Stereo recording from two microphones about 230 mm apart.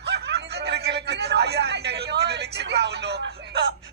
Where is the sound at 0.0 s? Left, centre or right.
Right.